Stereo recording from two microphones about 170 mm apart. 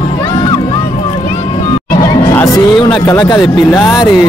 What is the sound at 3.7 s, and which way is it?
Speech, 10° left (ahead or behind).